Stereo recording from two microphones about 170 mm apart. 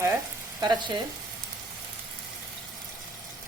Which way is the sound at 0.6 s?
25° right (ahead or behind).